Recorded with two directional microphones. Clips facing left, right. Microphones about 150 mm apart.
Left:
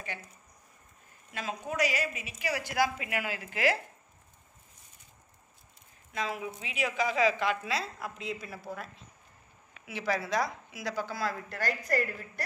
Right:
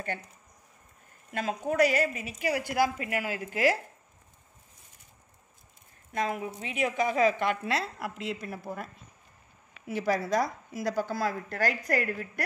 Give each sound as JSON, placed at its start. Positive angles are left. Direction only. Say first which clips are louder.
{"t": 1.3, "sound": "a woman's voice", "louder": "right 6 dB", "side_deg": -50}
{"t": 6.1, "sound": "a woman's voice", "louder": "right 4 dB", "side_deg": -50}
{"t": 8.5, "sound": "a woman's voice", "louder": "right 3 dB", "side_deg": -50}